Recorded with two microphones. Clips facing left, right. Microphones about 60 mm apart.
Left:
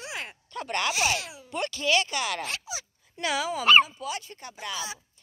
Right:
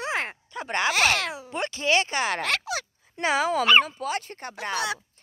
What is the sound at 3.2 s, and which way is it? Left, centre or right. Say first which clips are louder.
Speech: right 5 dB; right.